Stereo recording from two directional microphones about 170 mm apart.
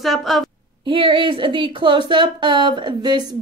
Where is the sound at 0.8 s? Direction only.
30° right (ahead or behind).